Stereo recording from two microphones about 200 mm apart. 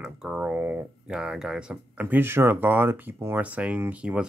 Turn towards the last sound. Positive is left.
turn(degrees=-5)  # may be behind; listen again after turning